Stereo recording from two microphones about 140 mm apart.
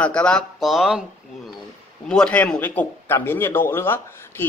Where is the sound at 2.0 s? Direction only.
5° left (ahead or behind).